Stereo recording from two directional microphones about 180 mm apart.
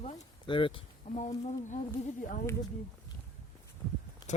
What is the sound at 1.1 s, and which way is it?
Speech, 40° left (ahead or behind).